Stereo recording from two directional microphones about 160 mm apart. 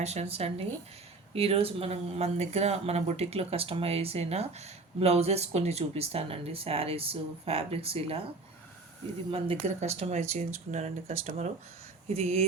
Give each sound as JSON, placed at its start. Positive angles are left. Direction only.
{"t": 0.0, "sound": "speech", "side_deg": -40}
{"t": 9.3, "sound": "speech", "side_deg": -40}